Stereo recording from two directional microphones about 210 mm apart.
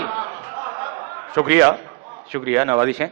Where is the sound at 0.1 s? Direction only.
20° right (ahead or behind).